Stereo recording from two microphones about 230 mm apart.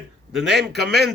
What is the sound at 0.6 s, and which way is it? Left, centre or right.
Speech, right.